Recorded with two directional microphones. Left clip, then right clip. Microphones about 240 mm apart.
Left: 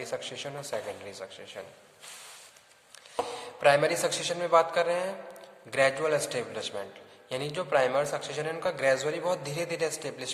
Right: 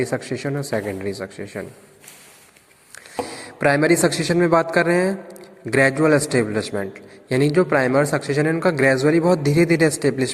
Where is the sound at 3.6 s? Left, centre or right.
Right.